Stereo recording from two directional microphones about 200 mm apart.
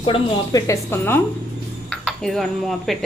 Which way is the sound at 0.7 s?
10° left (ahead or behind).